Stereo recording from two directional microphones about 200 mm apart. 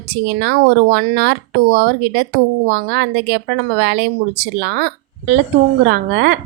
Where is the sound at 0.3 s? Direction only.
50° right (ahead or behind).